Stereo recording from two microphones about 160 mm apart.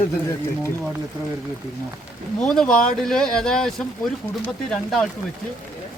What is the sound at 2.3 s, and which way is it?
Speech, 5° left (ahead or behind).